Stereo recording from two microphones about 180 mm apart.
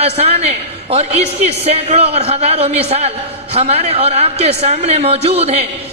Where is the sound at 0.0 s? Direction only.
35° right (ahead or behind).